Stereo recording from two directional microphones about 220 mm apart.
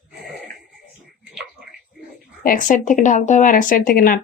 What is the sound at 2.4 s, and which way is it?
Speech, 40° left (ahead or behind).